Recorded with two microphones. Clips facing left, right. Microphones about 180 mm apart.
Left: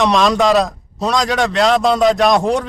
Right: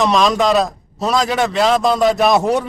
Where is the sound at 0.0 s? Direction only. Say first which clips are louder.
Left 1 dB; centre (ahead or behind).